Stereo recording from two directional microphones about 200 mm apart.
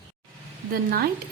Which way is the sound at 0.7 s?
50° right (ahead or behind).